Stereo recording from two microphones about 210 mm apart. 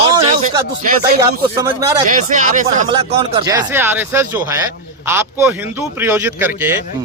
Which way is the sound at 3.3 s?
20° right (ahead or behind).